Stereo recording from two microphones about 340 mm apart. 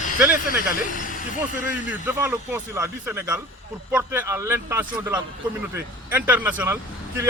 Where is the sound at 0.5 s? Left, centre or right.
Left.